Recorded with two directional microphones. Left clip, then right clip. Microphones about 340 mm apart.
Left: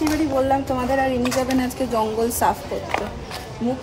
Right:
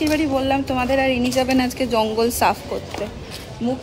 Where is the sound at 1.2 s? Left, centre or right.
Centre.